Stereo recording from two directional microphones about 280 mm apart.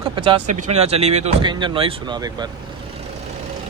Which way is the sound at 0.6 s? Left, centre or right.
Right.